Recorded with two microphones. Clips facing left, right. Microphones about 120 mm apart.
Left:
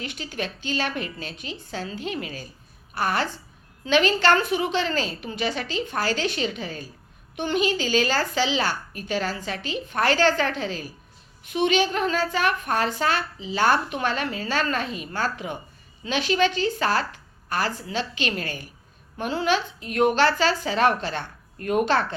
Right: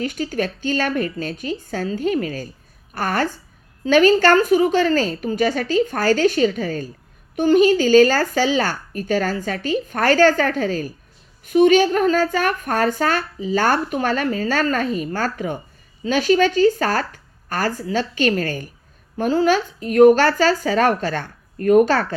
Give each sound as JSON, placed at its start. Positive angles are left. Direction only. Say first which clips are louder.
{"t": 0.0, "sound": "a woman's voice", "louder": "right 9 dB", "side_deg": -45}